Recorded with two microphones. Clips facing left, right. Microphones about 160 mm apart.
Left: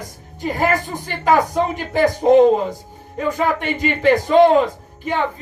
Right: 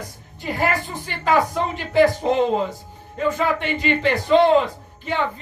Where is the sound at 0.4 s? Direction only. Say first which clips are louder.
Left 4 dB; 45° left (ahead or behind).